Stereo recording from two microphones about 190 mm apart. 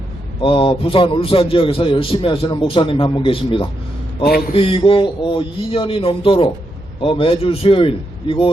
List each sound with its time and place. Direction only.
0.4 s a man's voice: 30° left (ahead or behind)